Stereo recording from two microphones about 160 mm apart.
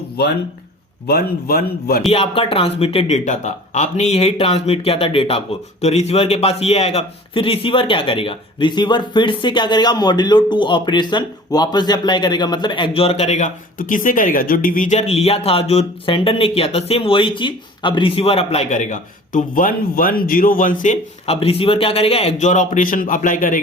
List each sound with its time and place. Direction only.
1.0 s a man's voice: 70° left (ahead or behind)
2.1 s a man's voice: 35° left (ahead or behind); by 23.6 s 55° left (ahead or behind)